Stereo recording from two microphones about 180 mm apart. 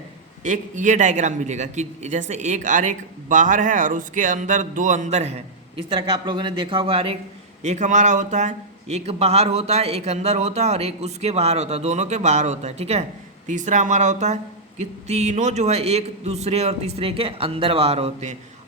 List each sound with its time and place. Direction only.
0.4 s a man's voice: 45° right (ahead or behind)